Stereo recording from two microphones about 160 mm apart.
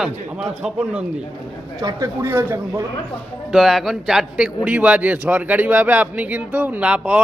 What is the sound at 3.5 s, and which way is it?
A man's voice, centre (ahead or behind).